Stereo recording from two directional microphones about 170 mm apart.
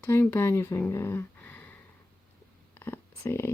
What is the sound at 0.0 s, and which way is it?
Speech, 10° left (ahead or behind).